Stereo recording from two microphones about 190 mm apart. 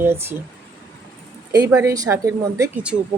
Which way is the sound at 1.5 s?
15° right (ahead or behind).